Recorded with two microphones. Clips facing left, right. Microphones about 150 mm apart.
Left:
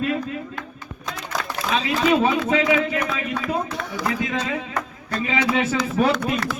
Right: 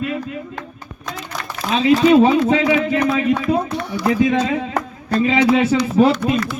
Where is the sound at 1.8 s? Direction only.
25° right (ahead or behind).